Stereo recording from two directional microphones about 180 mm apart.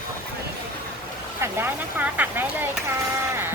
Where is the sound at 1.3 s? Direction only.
10° right (ahead or behind).